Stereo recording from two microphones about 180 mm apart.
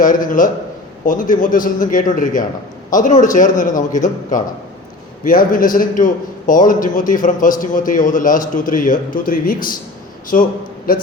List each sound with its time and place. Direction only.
0.0 s a man's voice: 45° left (ahead or behind)